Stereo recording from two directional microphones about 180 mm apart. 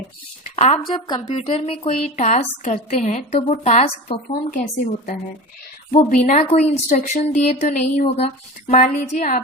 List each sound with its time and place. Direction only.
0.5 s speech: 35° left (ahead or behind)
1.3 s a woman's voice: 35° left (ahead or behind)
5.9 s a woman's voice: 40° left (ahead or behind)